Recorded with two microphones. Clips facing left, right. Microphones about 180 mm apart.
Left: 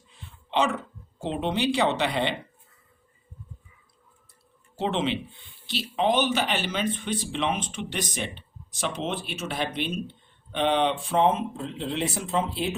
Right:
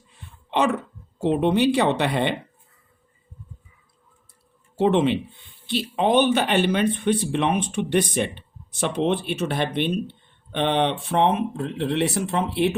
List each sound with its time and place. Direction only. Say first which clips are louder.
0.1 s throat clearing: right 2 dB; 60° right (ahead or behind)
1.2 s speech: right 7 dB; 55° right (ahead or behind)
4.8 s speech: right 7 dB; 55° right (ahead or behind)